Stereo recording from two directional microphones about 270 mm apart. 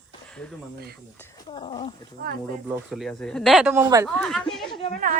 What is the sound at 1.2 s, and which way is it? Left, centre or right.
Speech, centre.